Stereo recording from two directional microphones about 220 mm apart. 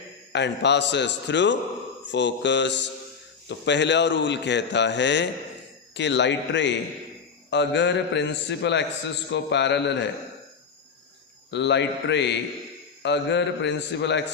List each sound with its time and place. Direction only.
0.3 s a man's voice: 50° left (ahead or behind)
11.5 s a man's voice: 50° left (ahead or behind)